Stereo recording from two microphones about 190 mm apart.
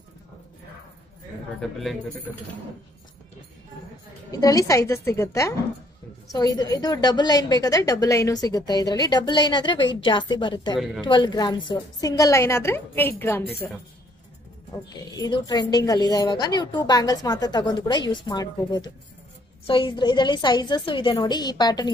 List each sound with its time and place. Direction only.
1.6 s speech: centre (ahead or behind)
4.3 s a woman's voice: 20° left (ahead or behind)
15.1 s a woman's voice: 20° left (ahead or behind)